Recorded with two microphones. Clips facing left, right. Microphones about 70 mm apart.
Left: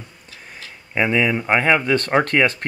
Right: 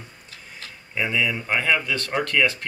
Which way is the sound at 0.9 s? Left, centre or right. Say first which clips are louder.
Left 6 dB; left.